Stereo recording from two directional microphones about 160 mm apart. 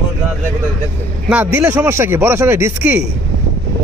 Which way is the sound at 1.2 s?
10° right (ahead or behind).